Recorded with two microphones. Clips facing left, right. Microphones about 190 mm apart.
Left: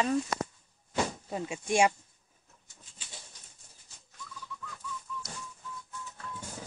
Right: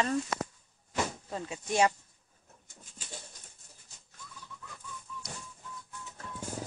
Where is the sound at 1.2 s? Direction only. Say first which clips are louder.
Left 3 dB; 15° left (ahead or behind).